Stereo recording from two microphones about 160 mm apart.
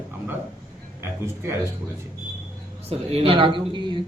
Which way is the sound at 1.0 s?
15° right (ahead or behind).